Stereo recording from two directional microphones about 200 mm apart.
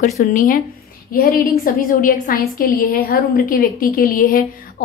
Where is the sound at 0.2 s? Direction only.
45° left (ahead or behind).